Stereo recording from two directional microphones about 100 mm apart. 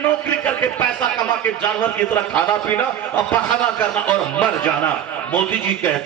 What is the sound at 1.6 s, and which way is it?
A man's voice, 15° left (ahead or behind).